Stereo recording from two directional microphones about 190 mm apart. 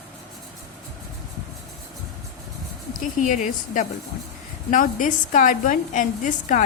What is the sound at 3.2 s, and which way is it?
Speech, 40° left (ahead or behind).